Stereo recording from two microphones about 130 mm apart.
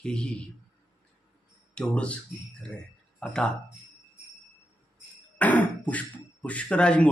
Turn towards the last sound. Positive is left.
turn(degrees=10)  # may be behind; listen again after turning